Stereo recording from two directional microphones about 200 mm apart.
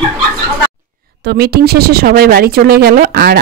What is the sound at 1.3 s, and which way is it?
Speech, 50° right (ahead or behind).